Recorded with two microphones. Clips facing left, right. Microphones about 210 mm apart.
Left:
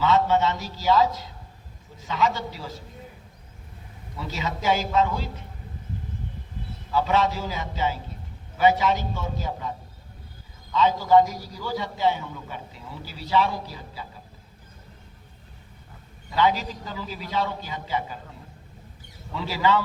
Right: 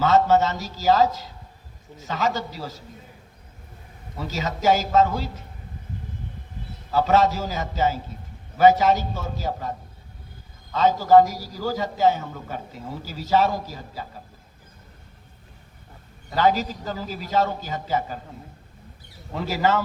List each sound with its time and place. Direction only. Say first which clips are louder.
0.0 s a man's voice: right 3 dB; 45° right (ahead or behind)
4.2 s a man's voice: right 4 dB; 40° right (ahead or behind)
6.9 s a man's voice: right 3 dB; 40° right (ahead or behind)
16.3 s a man's voice: right 2 dB; 45° right (ahead or behind)
19.3 s a man's voice: right 1 dB; 45° right (ahead or behind)